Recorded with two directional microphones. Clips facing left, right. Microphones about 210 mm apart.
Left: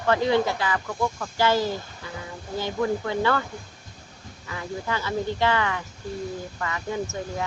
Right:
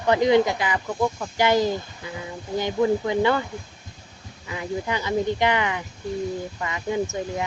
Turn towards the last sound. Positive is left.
turn(degrees=-15)  # may be behind; listen again after turning